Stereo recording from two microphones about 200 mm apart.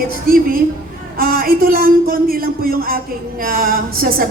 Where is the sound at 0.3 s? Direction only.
45° right (ahead or behind).